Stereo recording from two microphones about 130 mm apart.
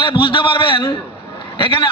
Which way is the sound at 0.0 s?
40° left (ahead or behind).